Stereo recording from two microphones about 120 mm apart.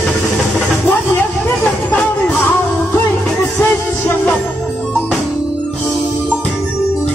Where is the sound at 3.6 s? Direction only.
15° left (ahead or behind).